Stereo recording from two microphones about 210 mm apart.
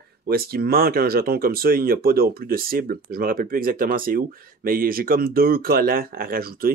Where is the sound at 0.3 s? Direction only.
45° right (ahead or behind).